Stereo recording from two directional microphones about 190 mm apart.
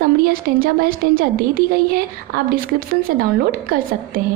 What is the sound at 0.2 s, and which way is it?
A woman's voice, 50° right (ahead or behind).